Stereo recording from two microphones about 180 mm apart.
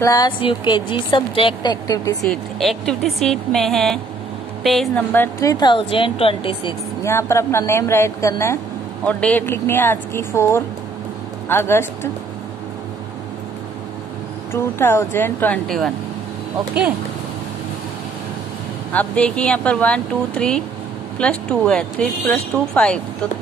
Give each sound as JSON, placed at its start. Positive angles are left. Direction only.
{"t": 0.0, "sound": "a woman's voice", "side_deg": 20}
{"t": 2.2, "sound": "a woman's voice", "side_deg": 0}
{"t": 7.0, "sound": "speech", "side_deg": 15}
{"t": 14.5, "sound": "speech", "side_deg": 15}
{"t": 18.9, "sound": "speech", "side_deg": 5}